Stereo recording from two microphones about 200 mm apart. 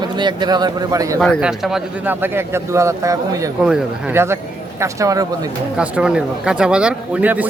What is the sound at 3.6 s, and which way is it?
Speech, 5° right (ahead or behind).